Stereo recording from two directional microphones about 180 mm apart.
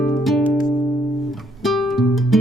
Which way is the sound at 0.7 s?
Centre (ahead or behind).